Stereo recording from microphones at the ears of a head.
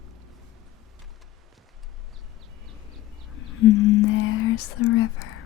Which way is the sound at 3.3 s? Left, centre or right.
Left.